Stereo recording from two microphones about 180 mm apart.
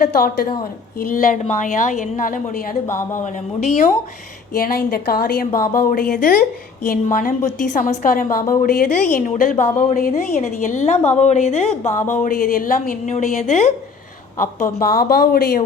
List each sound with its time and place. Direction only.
0.0 s a woman's voice: 55° left (ahead or behind)
4.5 s a woman's voice: 55° left (ahead or behind)